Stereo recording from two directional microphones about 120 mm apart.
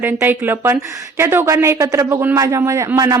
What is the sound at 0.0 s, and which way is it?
A woman's voice, 15° right (ahead or behind).